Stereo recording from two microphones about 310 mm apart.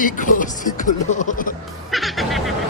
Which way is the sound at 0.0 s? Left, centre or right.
Left.